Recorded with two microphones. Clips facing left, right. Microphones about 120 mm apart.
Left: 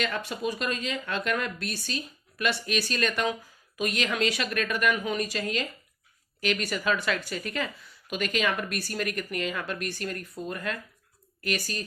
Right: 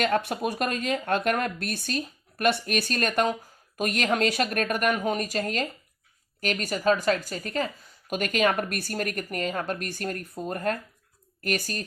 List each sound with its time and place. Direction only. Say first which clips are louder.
0.0 s speech: right 5 dB; 55° right (ahead or behind)